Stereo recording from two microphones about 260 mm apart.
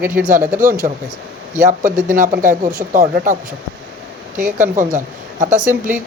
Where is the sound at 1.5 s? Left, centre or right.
Right.